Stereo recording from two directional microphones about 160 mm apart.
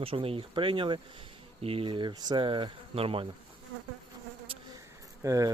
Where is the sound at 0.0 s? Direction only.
35° right (ahead or behind).